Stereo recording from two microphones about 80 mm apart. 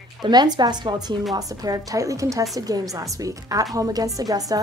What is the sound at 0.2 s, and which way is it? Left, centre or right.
A woman's voice, right.